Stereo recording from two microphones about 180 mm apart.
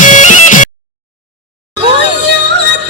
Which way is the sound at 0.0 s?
45° left (ahead or behind).